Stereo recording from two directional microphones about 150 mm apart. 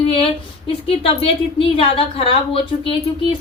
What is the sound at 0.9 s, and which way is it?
A woman's voice, 40° left (ahead or behind).